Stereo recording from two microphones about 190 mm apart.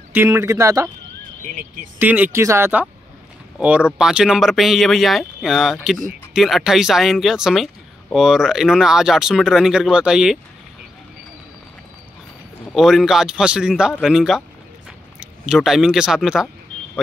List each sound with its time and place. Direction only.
0.1 s speech: 15° right (ahead or behind)
2.0 s speech: 10° right (ahead or behind)
12.7 s speech: centre (ahead or behind)